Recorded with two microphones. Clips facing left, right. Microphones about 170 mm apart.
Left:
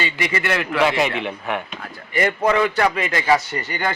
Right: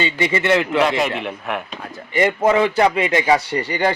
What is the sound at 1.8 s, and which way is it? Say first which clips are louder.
A man's voice: right 5 dB; 25° right (ahead or behind).